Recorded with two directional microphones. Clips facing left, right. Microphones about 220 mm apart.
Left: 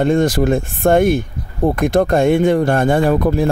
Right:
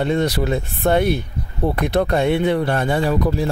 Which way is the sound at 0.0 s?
50° left (ahead or behind).